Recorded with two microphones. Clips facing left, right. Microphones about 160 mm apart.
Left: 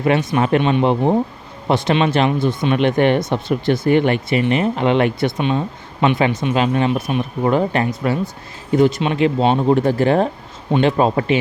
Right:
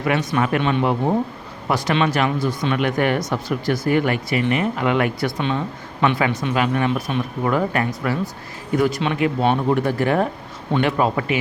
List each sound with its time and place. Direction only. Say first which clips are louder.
0.0 s speech: left 4 dB; 25° left (ahead or behind)